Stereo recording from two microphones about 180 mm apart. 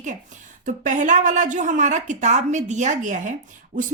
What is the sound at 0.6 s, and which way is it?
A woman's voice, 45° right (ahead or behind).